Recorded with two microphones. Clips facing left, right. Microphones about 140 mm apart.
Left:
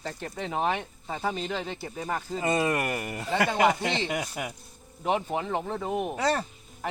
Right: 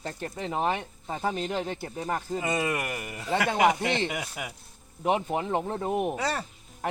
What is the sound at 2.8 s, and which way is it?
Speech, 40° left (ahead or behind).